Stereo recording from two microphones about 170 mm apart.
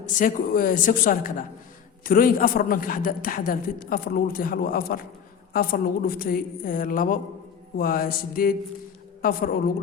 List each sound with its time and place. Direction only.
0.0 s a woman's voice: 55° left (ahead or behind)